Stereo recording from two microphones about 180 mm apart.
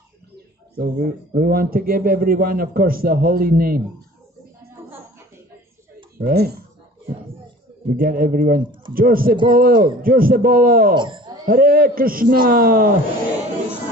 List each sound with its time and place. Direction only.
0.7 s speech: 55° right (ahead or behind)
6.1 s speech: 60° right (ahead or behind)
7.9 s a man's voice: 50° right (ahead or behind)
11.0 s a man's voice: 25° right (ahead or behind)
11.4 s a man's voice: 55° right (ahead or behind)